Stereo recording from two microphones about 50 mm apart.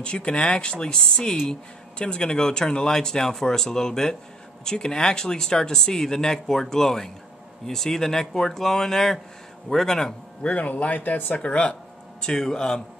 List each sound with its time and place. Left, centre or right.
0.0 s speech: left
10.4 s speech: left
11.4 s speech: left